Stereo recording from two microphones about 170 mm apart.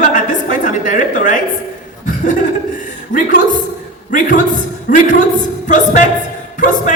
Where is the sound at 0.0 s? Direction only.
50° left (ahead or behind).